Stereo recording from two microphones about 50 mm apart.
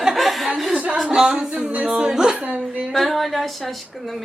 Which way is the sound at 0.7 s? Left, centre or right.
Right.